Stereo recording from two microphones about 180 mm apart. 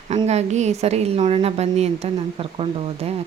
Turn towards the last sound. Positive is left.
turn(degrees=-30)  # may be behind; listen again after turning